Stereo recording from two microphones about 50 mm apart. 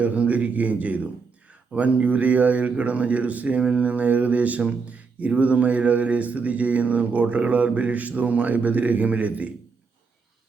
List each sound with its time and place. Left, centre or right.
0.0 s a man's voice: right